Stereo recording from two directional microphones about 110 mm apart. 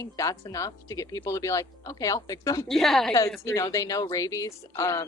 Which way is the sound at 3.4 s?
30° left (ahead or behind).